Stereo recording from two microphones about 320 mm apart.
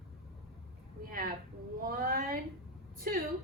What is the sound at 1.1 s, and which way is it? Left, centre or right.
A woman's voice, right.